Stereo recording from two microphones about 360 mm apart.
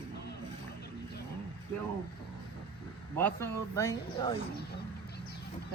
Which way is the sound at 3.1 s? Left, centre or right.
Centre.